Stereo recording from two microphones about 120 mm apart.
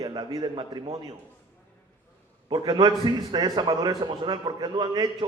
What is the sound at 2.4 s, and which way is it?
A man's voice, 35° right (ahead or behind).